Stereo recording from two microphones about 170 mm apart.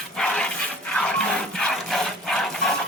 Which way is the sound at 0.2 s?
5° left (ahead or behind).